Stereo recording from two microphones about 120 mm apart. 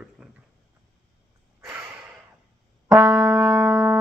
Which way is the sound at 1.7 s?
15° right (ahead or behind).